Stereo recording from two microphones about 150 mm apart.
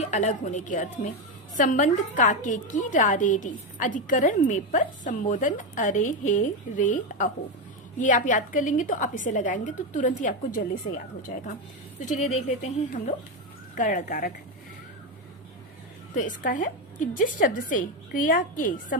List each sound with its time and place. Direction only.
0.0 s a woman's voice: 50° left (ahead or behind)
11.9 s a woman's voice: 55° left (ahead or behind); by 14.3 s 70° left (ahead or behind)
16.1 s a woman's voice: 60° left (ahead or behind)